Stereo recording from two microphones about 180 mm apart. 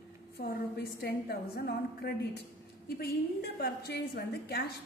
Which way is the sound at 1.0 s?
60° left (ahead or behind).